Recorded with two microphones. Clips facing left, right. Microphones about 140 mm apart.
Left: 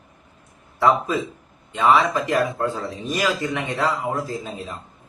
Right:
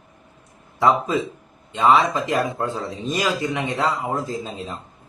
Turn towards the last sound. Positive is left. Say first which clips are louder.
# even
turn(degrees=-20)  # may be behind; listen again after turning